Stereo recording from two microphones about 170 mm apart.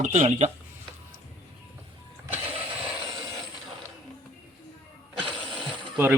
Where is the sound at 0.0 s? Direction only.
45° right (ahead or behind).